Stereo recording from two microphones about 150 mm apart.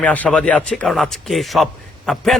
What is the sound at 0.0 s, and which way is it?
A man's voice, 10° left (ahead or behind).